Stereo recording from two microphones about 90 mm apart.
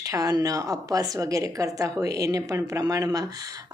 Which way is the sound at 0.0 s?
40° right (ahead or behind).